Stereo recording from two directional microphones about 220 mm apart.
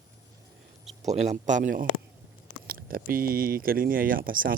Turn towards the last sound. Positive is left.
turn(degrees=-40)  # may be behind; listen again after turning